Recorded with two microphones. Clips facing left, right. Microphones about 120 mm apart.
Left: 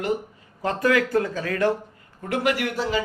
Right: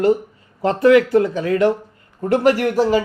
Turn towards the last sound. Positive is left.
turn(degrees=-45)  # may be behind; listen again after turning